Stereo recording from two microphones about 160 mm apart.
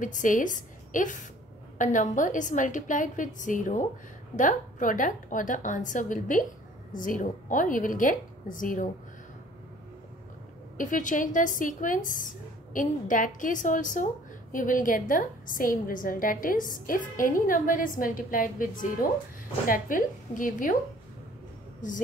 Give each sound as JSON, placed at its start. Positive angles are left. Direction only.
{"t": 0.0, "sound": "a woman's voice", "side_deg": 55}
{"t": 10.8, "sound": "a woman's voice", "side_deg": 55}